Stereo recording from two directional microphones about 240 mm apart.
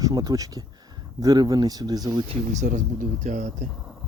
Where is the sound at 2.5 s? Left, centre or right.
Right.